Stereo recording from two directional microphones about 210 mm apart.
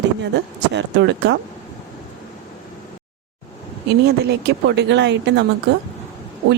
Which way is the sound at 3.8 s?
50° right (ahead or behind).